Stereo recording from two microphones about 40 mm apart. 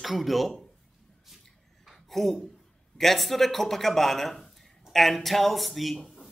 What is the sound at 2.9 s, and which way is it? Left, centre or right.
A man's voice, centre.